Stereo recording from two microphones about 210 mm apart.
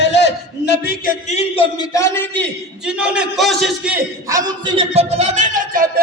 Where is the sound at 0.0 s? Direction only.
55° left (ahead or behind).